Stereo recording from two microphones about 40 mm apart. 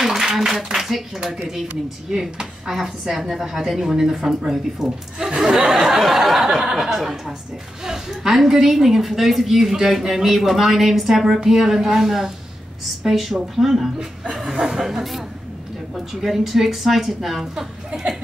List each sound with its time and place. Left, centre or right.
0.0 s a sound: centre
0.5 s a woman's voice: centre
6.5 s a woman's voice: centre
14.4 s a woman's voice: centre